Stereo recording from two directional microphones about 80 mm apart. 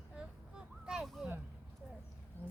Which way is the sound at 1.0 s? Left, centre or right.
Centre.